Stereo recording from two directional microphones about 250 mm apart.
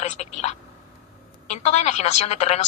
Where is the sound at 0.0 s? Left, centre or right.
Left.